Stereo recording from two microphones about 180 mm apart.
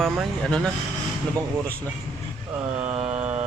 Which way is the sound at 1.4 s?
20° right (ahead or behind).